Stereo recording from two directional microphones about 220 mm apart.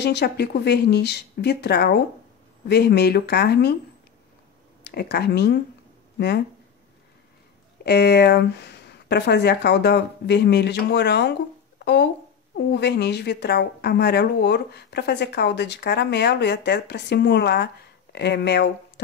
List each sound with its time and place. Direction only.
0.0 s a woman's voice: 50° left (ahead or behind)
4.8 s speech: 50° left (ahead or behind)
7.8 s a woman's voice: 50° left (ahead or behind)